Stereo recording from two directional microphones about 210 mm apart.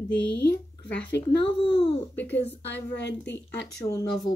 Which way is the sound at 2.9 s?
55° left (ahead or behind).